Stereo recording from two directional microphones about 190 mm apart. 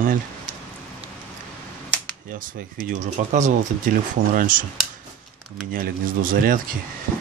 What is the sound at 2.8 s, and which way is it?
Speech, 45° right (ahead or behind).